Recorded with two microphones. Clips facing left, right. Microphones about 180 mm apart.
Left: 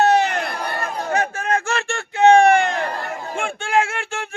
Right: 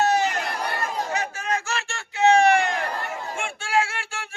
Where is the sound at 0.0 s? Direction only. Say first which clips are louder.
Left 5 dB; 60° left (ahead or behind).